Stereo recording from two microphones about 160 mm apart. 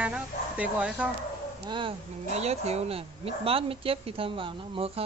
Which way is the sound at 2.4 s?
40° right (ahead or behind).